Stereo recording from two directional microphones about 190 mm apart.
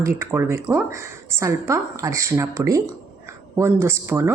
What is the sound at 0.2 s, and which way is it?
A woman's voice, 15° right (ahead or behind).